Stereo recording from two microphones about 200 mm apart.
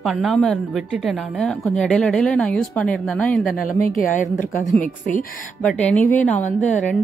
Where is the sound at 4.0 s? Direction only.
40° left (ahead or behind).